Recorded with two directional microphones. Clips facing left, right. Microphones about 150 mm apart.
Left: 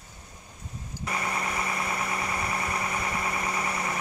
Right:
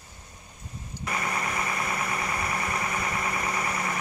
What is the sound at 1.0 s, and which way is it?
Engine, 25° left (ahead or behind).